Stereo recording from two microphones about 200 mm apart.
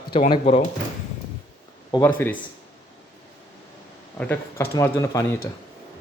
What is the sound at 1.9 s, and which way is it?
Speech, 10° left (ahead or behind).